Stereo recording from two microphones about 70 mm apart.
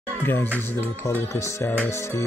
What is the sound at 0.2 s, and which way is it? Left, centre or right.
Speech, left.